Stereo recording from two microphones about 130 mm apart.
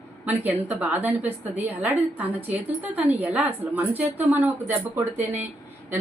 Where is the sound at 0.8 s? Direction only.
15° right (ahead or behind).